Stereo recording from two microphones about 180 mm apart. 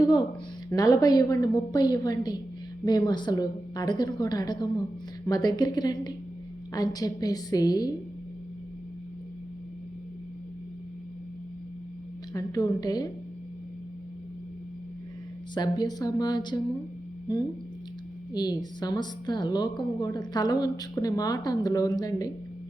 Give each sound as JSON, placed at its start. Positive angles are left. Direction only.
{"t": 0.7, "sound": "a woman's voice", "side_deg": 20}
{"t": 12.3, "sound": "a woman's voice", "side_deg": 20}
{"t": 15.5, "sound": "a woman's voice", "side_deg": 20}
{"t": 18.3, "sound": "a woman's voice", "side_deg": 20}